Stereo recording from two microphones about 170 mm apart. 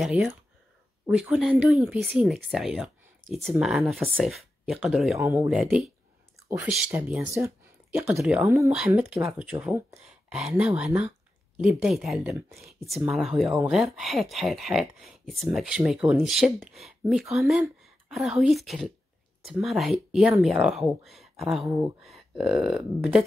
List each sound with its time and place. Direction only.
0.0 s speech: centre (ahead or behind)
5.2 s speech: 10° right (ahead or behind)
5.6 s speech: centre (ahead or behind)
6.9 s speech: 10° right (ahead or behind)
10.0 s speech: 5° right (ahead or behind)
12.3 s speech: 15° right (ahead or behind)
12.8 s speech: centre (ahead or behind)
21.6 s speech: 15° right (ahead or behind)
22.0 s speech: centre (ahead or behind)